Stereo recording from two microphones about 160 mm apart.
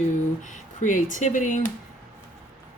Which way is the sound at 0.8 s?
55° left (ahead or behind).